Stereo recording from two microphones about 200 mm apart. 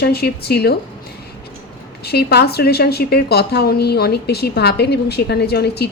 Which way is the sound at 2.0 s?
55° left (ahead or behind).